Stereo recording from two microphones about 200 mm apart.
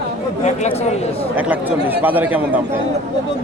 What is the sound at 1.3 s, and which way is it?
Speech, 10° right (ahead or behind).